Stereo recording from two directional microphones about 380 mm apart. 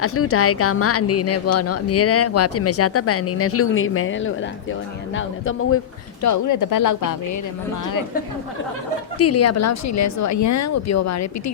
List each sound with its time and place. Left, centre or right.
0.0 s speech: left
6.2 s speech: left
9.1 s speech: left